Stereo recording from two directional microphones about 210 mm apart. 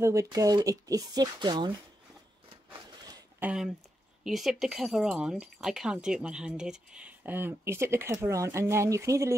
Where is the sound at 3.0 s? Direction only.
20° right (ahead or behind).